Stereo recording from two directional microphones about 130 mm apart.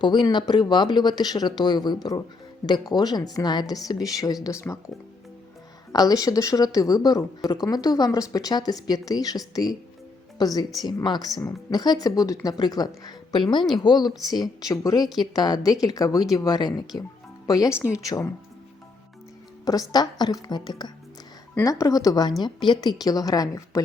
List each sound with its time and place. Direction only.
0.0 s speech: 35° left (ahead or behind)
5.9 s speech: 30° left (ahead or behind)
19.6 s speech: 30° left (ahead or behind)
21.5 s speech: 20° left (ahead or behind)